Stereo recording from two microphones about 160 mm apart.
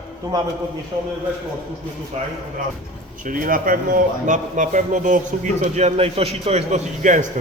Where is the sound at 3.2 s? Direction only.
60° right (ahead or behind).